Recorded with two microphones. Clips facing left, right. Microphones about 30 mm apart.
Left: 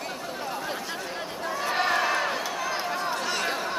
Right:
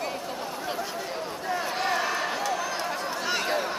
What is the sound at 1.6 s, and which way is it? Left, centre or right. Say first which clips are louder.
Crowd: left 6 dB; centre.